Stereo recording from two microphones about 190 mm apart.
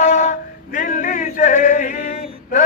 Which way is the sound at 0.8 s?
45° left (ahead or behind).